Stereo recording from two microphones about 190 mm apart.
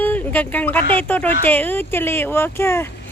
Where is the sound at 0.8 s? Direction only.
30° right (ahead or behind).